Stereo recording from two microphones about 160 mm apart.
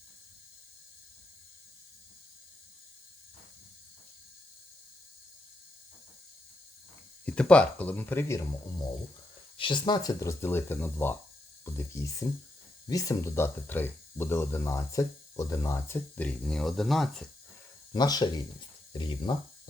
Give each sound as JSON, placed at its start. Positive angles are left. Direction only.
{"t": 7.3, "sound": "speech", "side_deg": 5}
{"t": 9.6, "sound": "speech", "side_deg": 30}
{"t": 17.9, "sound": "speech", "side_deg": 25}